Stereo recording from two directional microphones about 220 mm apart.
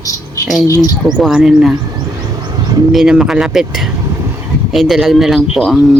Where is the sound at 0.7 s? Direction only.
15° left (ahead or behind).